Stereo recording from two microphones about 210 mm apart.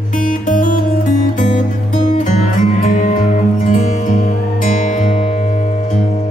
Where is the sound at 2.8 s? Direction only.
40° left (ahead or behind).